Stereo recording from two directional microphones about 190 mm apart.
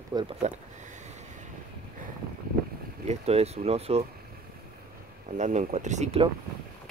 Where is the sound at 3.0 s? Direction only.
35° right (ahead or behind).